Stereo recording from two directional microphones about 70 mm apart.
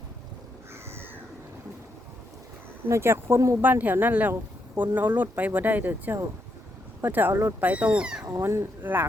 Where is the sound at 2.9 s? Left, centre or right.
Right; by 8.2 s centre.